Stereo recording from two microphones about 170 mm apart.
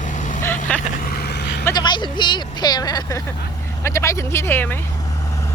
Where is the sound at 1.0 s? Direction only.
70° left (ahead or behind).